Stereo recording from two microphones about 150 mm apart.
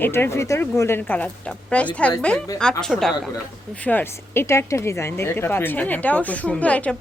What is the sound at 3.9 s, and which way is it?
A woman's voice, 15° left (ahead or behind).